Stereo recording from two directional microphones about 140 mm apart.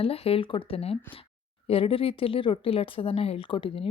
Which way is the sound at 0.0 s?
45° left (ahead or behind).